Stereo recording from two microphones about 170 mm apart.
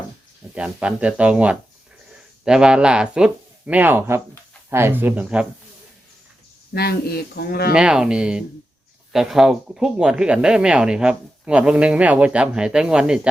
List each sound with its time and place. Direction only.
0.5 s speech: 5° right (ahead or behind)
6.7 s speech: 65° left (ahead or behind)
7.7 s speech: 5° right (ahead or behind)